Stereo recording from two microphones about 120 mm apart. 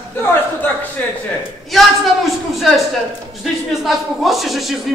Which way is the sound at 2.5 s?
Centre (ahead or behind).